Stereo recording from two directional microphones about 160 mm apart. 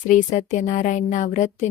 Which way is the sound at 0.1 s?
50° left (ahead or behind).